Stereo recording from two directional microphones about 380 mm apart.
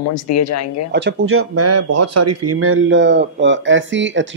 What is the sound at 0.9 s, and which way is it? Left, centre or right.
Speech, right.